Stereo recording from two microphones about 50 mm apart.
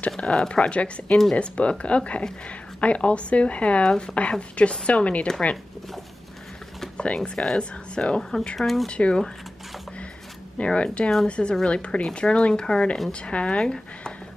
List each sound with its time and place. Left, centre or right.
0.2 s a woman's voice: centre
7.2 s speech: centre
7.5 s a woman's voice: left
8.2 s speech: centre
8.8 s a woman's voice: left
10.6 s a woman's voice: left